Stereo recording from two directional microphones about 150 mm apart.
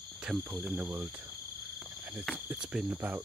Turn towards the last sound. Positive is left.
turn(degrees=-15)  # may be behind; listen again after turning